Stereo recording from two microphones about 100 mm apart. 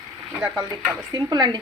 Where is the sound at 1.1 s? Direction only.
45° right (ahead or behind).